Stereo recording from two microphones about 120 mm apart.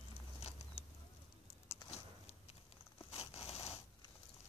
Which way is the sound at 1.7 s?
60° left (ahead or behind).